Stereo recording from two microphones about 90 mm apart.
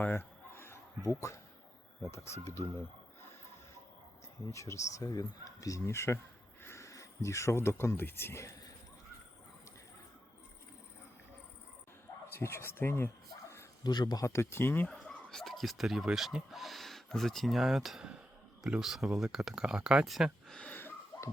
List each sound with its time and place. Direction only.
0.0 s a sound: 25° left (ahead or behind)
2.0 s speech: 30° left (ahead or behind)
4.5 s speech: 35° left (ahead or behind)
12.3 s speech: 30° left (ahead or behind)
13.8 s speech: 50° left (ahead or behind)
14.3 s speech: 30° left (ahead or behind)
14.8 s speech: 5° left (ahead or behind)
20.6 s a sound: 20° left (ahead or behind)